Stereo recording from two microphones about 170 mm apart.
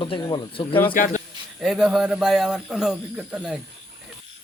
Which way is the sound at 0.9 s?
50° left (ahead or behind).